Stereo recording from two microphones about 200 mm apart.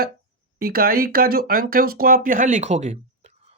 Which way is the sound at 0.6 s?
45° right (ahead or behind).